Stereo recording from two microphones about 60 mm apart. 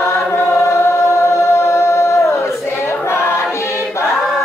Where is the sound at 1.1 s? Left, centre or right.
Left.